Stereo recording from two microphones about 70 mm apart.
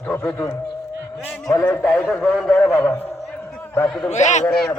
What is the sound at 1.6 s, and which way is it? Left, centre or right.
A man's voice, centre.